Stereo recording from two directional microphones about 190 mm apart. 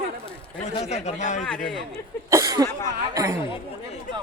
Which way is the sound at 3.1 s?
15° right (ahead or behind).